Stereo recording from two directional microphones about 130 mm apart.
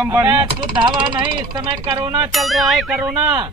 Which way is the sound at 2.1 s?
Centre (ahead or behind).